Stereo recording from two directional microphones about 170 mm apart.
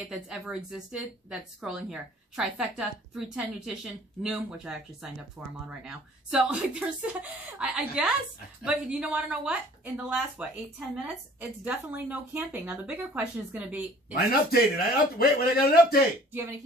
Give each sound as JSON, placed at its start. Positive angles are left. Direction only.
{"t": 0.1, "sound": "a woman's voice", "side_deg": -5}
{"t": 14.5, "sound": "a man's voice", "side_deg": 60}